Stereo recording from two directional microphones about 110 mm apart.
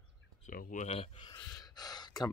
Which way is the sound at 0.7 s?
75° left (ahead or behind).